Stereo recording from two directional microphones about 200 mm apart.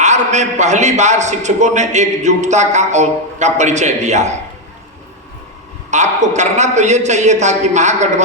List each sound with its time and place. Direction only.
0.0 s a man's voice: 35° right (ahead or behind)
5.9 s a man's voice: 35° right (ahead or behind)